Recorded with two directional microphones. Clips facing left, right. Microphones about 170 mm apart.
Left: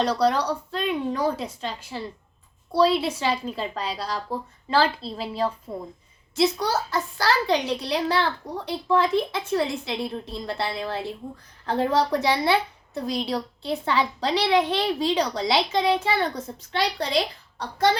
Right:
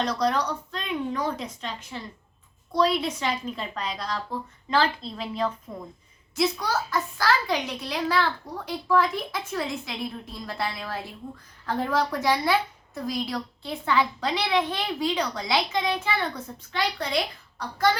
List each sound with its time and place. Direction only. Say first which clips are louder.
0.0 s a woman's voice: left 3 dB; 35° left (ahead or behind)